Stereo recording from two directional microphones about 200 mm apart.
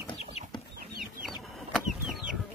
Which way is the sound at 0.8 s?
45° right (ahead or behind).